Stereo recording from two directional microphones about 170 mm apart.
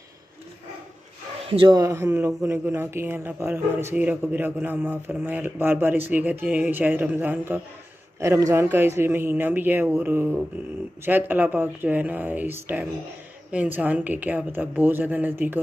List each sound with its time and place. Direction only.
1.5 s speech: 30° right (ahead or behind)
1.8 s speech: 15° right (ahead or behind)